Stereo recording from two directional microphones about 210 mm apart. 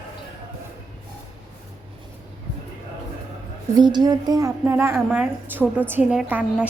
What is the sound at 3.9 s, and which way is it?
A woman's voice, 20° right (ahead or behind).